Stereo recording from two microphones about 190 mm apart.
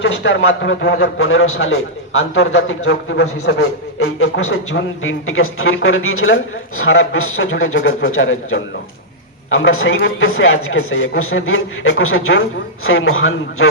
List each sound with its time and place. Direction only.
0.0 s a man's voice: 75° left (ahead or behind)